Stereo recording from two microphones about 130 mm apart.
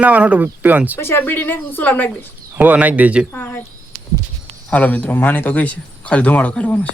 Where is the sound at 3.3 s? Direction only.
20° left (ahead or behind).